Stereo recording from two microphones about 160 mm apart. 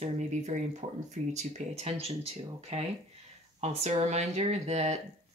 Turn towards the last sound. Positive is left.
turn(degrees=-45)  # may be behind; listen again after turning